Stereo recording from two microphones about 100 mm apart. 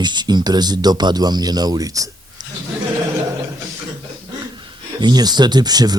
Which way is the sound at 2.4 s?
45° right (ahead or behind).